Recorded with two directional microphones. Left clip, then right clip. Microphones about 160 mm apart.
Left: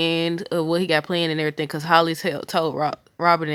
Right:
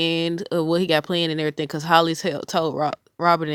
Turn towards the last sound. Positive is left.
turn(degrees=-40)  # may be behind; listen again after turning